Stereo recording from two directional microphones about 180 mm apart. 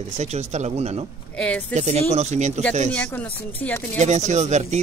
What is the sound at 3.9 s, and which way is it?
Speech, 40° right (ahead or behind).